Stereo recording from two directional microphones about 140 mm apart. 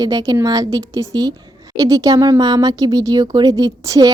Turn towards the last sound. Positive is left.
turn(degrees=-25)  # may be behind; listen again after turning